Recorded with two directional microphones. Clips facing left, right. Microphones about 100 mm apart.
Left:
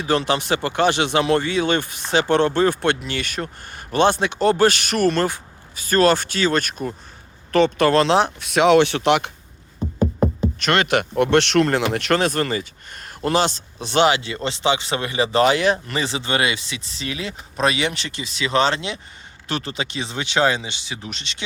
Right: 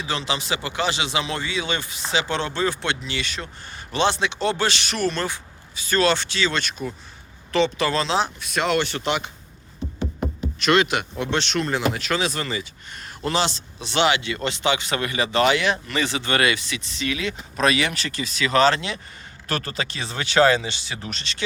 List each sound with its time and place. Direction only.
0.0 s speech: 50° left (ahead or behind); by 9.3 s 70° left (ahead or behind)
10.0 s speech: 45° left (ahead or behind); by 21.4 s 20° left (ahead or behind)